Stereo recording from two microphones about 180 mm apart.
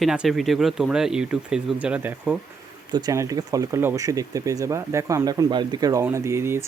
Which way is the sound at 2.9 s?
20° right (ahead or behind).